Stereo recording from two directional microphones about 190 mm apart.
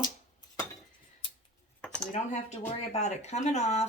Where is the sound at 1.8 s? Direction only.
5° left (ahead or behind).